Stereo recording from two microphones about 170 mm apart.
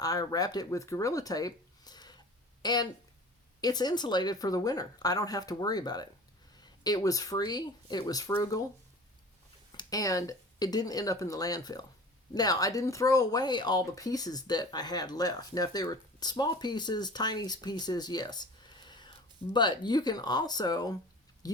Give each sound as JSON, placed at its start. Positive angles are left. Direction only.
{"t": 0.0, "sound": "speech", "side_deg": 20}
{"t": 9.7, "sound": "speech", "side_deg": 20}